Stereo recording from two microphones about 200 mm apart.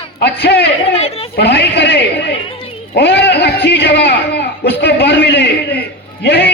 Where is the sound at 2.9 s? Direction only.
55° left (ahead or behind).